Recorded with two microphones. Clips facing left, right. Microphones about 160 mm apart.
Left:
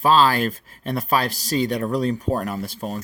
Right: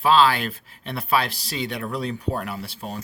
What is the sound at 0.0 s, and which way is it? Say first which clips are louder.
Speech: left 1 dB; 40° left (ahead or behind).